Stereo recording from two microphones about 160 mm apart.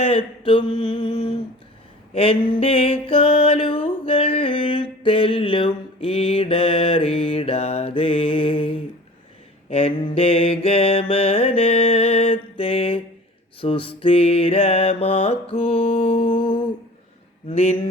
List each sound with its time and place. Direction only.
0.0 s mantra: 35° left (ahead or behind)